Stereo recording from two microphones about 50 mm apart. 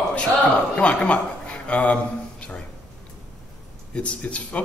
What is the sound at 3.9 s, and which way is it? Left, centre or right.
Speech, left.